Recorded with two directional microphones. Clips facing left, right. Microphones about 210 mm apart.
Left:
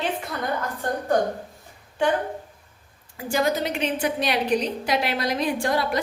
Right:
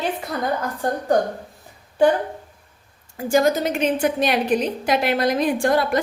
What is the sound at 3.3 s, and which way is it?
A woman's voice, 45° right (ahead or behind).